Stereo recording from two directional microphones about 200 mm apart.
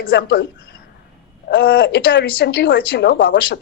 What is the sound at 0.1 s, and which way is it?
Speech, 60° left (ahead or behind).